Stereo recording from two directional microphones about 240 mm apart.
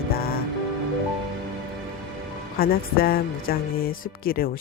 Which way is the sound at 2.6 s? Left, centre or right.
Left.